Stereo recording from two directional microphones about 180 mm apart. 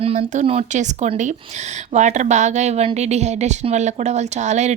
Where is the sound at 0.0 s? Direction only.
35° right (ahead or behind).